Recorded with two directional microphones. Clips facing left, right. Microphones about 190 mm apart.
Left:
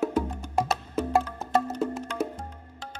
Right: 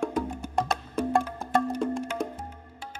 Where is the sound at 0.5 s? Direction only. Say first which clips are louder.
Left 2 dB; 5° left (ahead or behind).